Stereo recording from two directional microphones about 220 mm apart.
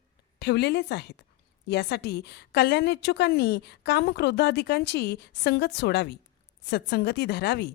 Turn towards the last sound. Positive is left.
turn(degrees=50)  # may be behind; listen again after turning